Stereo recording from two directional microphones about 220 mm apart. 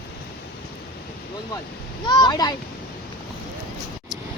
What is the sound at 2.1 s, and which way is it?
Speech, 20° left (ahead or behind).